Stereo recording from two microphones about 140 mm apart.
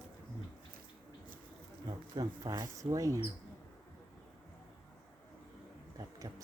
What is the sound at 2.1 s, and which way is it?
Speech, 25° right (ahead or behind).